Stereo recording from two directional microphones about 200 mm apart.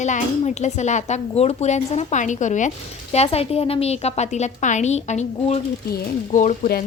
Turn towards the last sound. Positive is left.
turn(degrees=40)  # may be behind; listen again after turning